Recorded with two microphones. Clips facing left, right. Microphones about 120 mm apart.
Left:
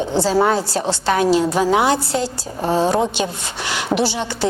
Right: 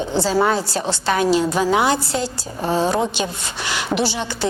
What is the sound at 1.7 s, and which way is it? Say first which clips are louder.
A woman's voice: left 2 dB; 35° left (ahead or behind).